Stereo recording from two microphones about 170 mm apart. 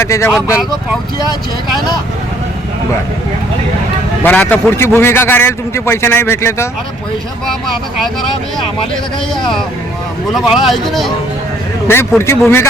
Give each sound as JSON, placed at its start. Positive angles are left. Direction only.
{"t": 0.0, "sound": "a man's voice", "side_deg": 15}
{"t": 4.2, "sound": "a man's voice", "side_deg": 10}
{"t": 10.3, "sound": "speech", "side_deg": 0}
{"t": 11.9, "sound": "a man's voice", "side_deg": 15}